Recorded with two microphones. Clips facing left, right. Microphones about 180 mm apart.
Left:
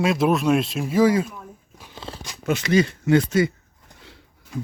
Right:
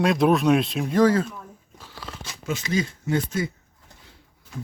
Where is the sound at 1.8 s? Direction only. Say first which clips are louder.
Left 2 dB; 20° left (ahead or behind).